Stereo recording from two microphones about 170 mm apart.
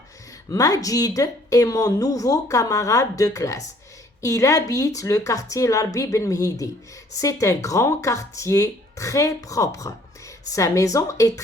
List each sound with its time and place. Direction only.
0.5 s speech: 20° left (ahead or behind)